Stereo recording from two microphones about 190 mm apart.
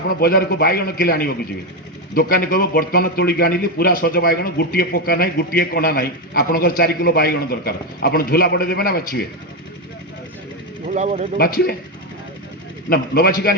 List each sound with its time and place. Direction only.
0.2 s a man's voice: 55° left (ahead or behind)
10.8 s speech: 40° right (ahead or behind)
11.3 s a man's voice: 55° left (ahead or behind)
12.9 s a man's voice: 55° left (ahead or behind)